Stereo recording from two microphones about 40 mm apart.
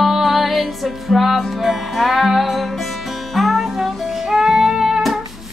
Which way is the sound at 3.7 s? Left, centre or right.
Centre.